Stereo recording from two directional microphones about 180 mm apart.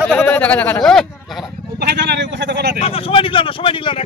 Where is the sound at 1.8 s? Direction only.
65° right (ahead or behind).